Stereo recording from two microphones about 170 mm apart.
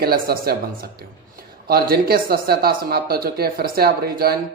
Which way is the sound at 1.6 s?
65° right (ahead or behind).